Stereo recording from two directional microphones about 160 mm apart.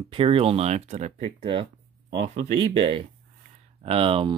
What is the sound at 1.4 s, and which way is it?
Speech, 30° right (ahead or behind).